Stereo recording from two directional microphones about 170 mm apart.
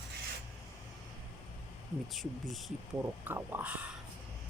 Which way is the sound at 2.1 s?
Centre (ahead or behind).